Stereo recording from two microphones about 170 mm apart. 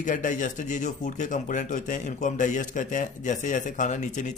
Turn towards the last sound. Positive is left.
turn(degrees=45)  # may be behind; listen again after turning